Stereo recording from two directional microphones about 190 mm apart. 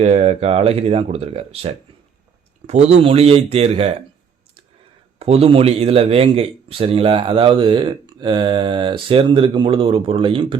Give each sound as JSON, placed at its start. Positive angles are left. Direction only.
{"t": 0.0, "sound": "speech", "side_deg": -35}
{"t": 5.2, "sound": "speech", "side_deg": -30}